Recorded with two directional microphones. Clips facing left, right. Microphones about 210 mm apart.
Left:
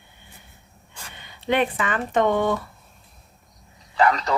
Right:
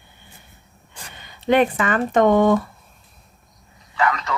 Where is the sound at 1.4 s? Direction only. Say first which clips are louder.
Right 5 dB; 45° right (ahead or behind).